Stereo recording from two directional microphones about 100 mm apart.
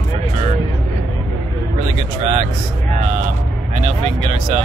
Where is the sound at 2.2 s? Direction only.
90° right.